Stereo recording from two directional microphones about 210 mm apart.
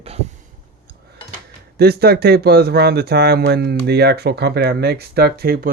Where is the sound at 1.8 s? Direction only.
50° right (ahead or behind).